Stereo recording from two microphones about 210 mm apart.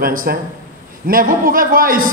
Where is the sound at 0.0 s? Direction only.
40° right (ahead or behind).